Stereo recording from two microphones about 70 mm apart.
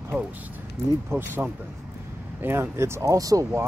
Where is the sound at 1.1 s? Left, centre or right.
Right.